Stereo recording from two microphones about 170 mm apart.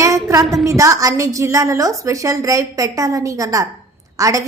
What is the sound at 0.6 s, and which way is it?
A woman's voice, 20° right (ahead or behind).